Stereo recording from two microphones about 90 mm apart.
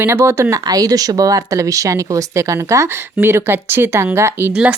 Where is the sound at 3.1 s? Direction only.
25° right (ahead or behind).